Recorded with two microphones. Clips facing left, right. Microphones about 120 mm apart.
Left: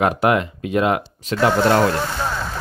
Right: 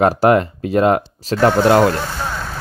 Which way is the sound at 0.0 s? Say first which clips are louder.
Right 4 dB; 40° right (ahead or behind).